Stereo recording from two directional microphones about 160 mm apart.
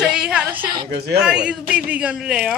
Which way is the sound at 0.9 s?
80° right.